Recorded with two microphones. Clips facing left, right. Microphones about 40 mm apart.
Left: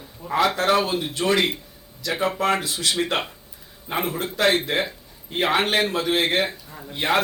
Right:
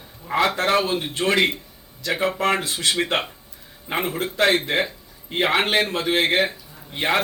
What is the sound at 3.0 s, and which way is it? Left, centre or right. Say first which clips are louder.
A man's voice: right 1 dB; right.